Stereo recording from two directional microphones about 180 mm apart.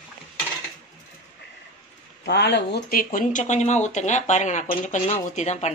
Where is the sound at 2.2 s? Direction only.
70° left (ahead or behind).